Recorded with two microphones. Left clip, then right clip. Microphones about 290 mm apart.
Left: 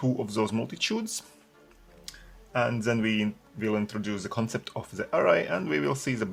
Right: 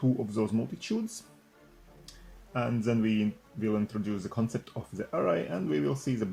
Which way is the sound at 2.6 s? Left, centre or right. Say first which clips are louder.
Left 4 dB; left.